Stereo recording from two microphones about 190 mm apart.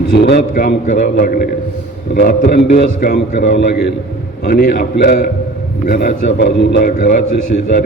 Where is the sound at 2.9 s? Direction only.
55° left (ahead or behind).